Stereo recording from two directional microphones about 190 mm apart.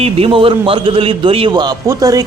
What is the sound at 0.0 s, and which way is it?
A man's voice, 30° right (ahead or behind).